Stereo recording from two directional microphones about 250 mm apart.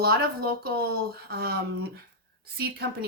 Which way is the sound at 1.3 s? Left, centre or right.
Right.